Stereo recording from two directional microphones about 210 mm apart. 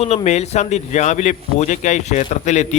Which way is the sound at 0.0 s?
30° left (ahead or behind).